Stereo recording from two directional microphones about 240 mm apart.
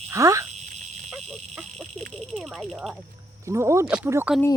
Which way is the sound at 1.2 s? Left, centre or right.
Centre.